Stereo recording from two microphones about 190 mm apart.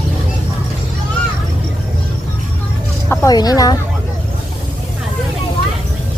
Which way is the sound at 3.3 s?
20° left (ahead or behind).